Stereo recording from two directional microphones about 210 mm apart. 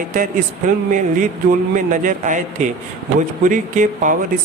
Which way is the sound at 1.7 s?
35° right (ahead or behind).